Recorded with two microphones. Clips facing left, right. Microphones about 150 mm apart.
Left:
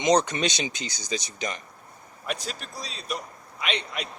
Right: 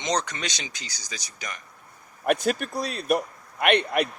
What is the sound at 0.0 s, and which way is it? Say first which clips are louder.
Speech: left 6 dB; 20° left (ahead or behind).